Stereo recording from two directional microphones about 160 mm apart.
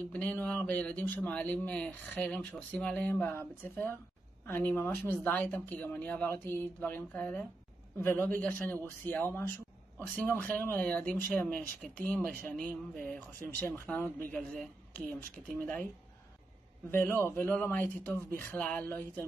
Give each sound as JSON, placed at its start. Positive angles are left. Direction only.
{"t": 0.1, "sound": "speech", "side_deg": 10}
{"t": 16.9, "sound": "speech", "side_deg": 15}